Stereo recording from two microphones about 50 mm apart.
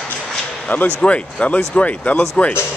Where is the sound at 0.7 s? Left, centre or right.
Left.